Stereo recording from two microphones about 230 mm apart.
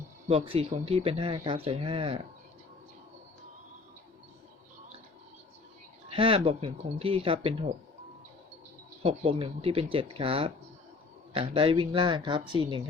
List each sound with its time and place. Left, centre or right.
0.3 s speech: right
6.1 s speech: right
9.0 s speech: right